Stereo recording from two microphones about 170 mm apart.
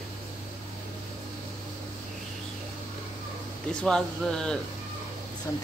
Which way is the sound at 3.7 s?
5° left (ahead or behind).